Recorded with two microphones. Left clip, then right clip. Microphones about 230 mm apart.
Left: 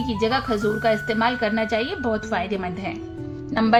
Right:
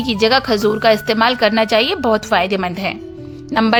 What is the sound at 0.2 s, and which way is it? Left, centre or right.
A woman's voice, right.